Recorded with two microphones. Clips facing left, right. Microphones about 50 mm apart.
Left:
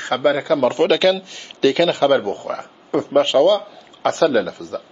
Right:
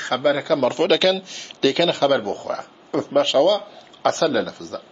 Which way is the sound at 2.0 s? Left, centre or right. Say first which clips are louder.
Left 3 dB; centre.